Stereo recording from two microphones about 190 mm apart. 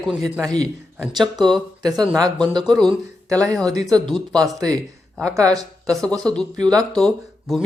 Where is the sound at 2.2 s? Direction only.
20° right (ahead or behind).